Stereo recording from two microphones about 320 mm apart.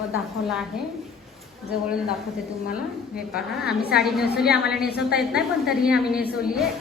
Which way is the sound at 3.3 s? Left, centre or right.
Centre.